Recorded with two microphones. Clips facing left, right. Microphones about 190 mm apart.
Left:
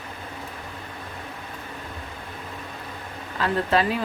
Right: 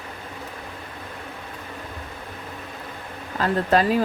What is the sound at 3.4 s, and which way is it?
Speech, 40° right (ahead or behind).